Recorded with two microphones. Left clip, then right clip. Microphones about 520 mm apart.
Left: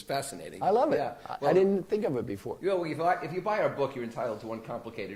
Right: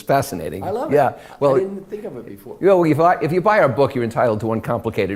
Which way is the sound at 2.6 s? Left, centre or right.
Right.